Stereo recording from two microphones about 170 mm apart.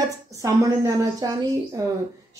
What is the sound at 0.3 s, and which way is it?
A woman's voice, 20° right (ahead or behind).